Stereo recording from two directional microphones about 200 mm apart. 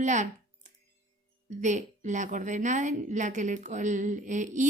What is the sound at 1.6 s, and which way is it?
A woman's voice, 35° right (ahead or behind).